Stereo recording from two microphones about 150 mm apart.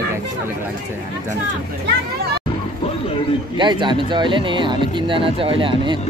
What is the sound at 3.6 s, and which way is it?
Speech, 30° right (ahead or behind).